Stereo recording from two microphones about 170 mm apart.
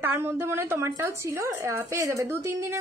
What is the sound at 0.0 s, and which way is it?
A woman's voice, 15° right (ahead or behind).